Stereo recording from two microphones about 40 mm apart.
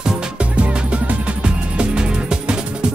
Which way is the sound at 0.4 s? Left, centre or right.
Right.